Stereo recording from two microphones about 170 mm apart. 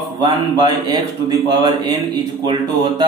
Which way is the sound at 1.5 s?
25° right (ahead or behind).